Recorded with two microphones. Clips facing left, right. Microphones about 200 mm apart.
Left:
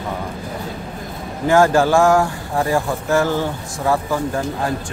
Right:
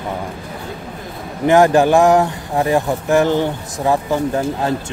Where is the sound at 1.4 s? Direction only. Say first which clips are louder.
Right 3 dB; 20° right (ahead or behind).